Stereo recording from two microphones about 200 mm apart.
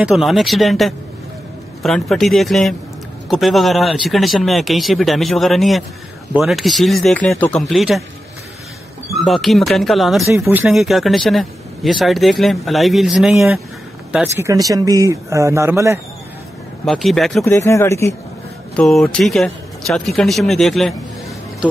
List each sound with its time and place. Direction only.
0.0 s speech: centre (ahead or behind)
9.2 s speech: centre (ahead or behind)
10.3 s a man's voice: 15° right (ahead or behind)
10.7 s speech: centre (ahead or behind)
14.1 s a man's voice: 15° right (ahead or behind)
16.8 s speech: centre (ahead or behind)
17.5 s speech: 15° left (ahead or behind)
18.8 s speech: 5° left (ahead or behind)